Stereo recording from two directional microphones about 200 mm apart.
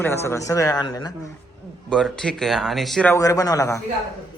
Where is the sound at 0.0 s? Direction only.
10° left (ahead or behind).